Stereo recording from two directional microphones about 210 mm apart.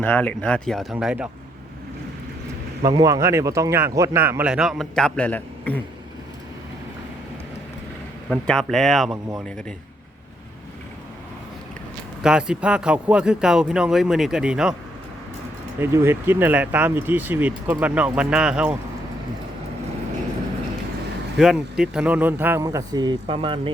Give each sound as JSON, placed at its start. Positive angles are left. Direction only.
{"t": 0.0, "sound": "speech", "side_deg": 10}
{"t": 2.8, "sound": "speech", "side_deg": -15}
{"t": 8.3, "sound": "speech", "side_deg": 0}
{"t": 12.2, "sound": "speech", "side_deg": -5}
{"t": 15.8, "sound": "speech", "side_deg": -10}
{"t": 21.3, "sound": "speech", "side_deg": 0}